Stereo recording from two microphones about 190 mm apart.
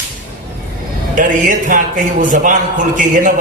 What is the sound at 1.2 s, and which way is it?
A man's voice, 40° right (ahead or behind).